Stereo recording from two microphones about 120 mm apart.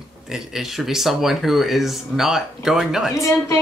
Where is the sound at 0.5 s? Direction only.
Centre (ahead or behind).